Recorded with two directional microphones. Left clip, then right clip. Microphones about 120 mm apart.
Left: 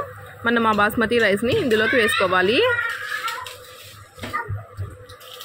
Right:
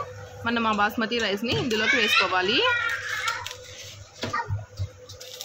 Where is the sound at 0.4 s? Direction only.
25° left (ahead or behind).